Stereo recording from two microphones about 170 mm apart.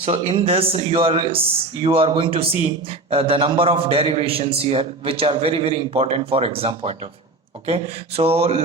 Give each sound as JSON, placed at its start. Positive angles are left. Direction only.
{"t": 0.0, "sound": "speech", "side_deg": -35}